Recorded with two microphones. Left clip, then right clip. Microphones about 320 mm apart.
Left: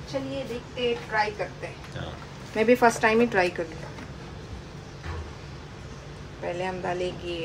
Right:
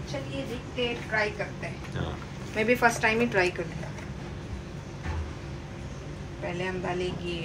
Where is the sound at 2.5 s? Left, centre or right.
Left.